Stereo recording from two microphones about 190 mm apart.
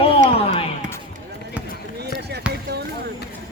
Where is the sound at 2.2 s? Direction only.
60° right (ahead or behind).